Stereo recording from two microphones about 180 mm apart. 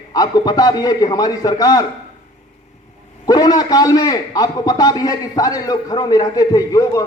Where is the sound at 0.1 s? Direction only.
20° left (ahead or behind).